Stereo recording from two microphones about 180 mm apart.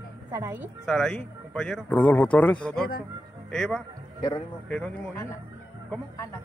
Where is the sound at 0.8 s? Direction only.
5° left (ahead or behind).